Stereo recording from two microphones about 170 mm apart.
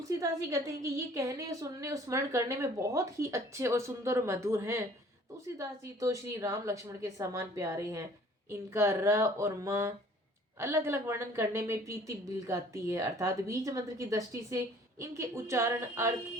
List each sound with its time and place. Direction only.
0.2 s a woman's voice: 20° right (ahead or behind)